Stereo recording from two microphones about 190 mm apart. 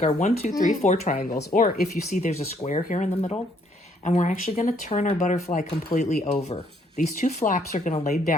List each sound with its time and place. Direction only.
0.0 s speech: 35° left (ahead or behind)